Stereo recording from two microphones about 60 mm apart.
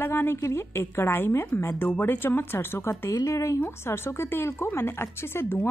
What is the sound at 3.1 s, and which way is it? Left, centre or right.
Speech, left.